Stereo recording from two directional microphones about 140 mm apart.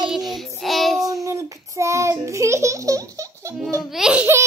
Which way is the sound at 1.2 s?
20° right (ahead or behind).